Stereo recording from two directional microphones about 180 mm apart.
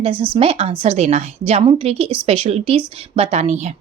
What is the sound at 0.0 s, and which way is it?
Speech, 30° right (ahead or behind).